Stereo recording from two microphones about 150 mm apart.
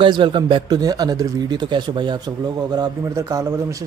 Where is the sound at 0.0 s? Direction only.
30° right (ahead or behind).